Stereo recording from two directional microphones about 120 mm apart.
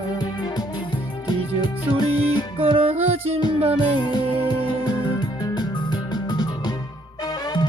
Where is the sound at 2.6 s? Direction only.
50° right (ahead or behind).